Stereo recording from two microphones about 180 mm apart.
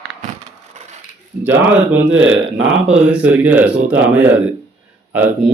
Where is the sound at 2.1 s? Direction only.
90° right.